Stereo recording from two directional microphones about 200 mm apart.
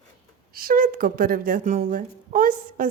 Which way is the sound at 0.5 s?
45° right (ahead or behind).